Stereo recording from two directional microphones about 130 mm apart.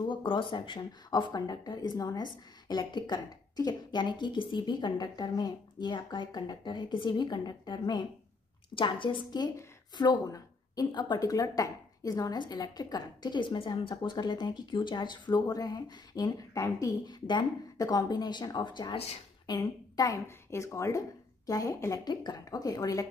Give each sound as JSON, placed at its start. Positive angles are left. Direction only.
{"t": 0.0, "sound": "speech", "side_deg": 40}